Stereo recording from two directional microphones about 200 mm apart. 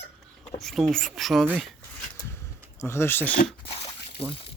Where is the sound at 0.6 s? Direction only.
Centre (ahead or behind).